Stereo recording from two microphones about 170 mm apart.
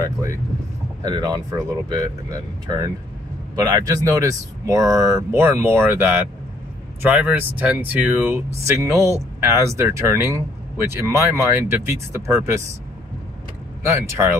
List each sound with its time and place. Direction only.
0.0 s speech: 15° right (ahead or behind)
13.8 s speech: 15° right (ahead or behind)